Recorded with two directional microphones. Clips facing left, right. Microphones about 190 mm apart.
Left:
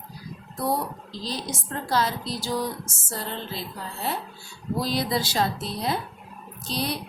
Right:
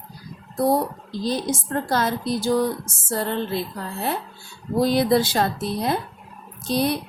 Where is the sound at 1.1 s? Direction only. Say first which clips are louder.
Right 8 dB; 50° right (ahead or behind).